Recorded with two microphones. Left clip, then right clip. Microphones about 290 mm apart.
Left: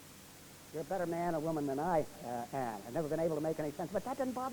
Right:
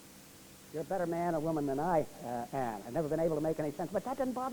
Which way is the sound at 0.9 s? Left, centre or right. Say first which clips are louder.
Right 2 dB; left.